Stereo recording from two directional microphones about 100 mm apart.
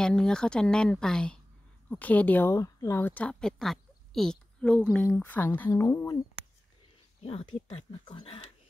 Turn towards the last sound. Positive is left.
turn(degrees=75)  # may be behind; listen again after turning